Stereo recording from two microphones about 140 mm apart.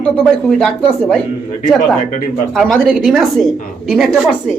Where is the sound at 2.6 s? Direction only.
5° left (ahead or behind).